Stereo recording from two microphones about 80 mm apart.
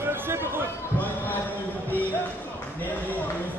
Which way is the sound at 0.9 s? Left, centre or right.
Left.